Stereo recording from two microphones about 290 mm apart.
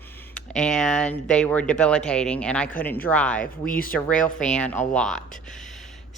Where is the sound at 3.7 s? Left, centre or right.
Left.